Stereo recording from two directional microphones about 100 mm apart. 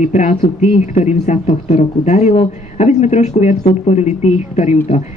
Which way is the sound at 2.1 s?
90° left.